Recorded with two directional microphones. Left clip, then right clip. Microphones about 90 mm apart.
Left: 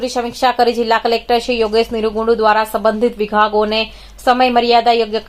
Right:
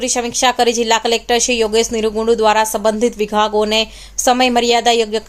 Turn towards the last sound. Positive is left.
turn(degrees=-40)  # may be behind; listen again after turning